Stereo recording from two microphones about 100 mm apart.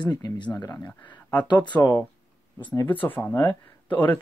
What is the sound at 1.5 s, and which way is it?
Speech, 50° left (ahead or behind).